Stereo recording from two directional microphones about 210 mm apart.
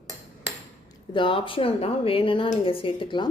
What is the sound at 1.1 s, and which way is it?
Speech, 25° left (ahead or behind).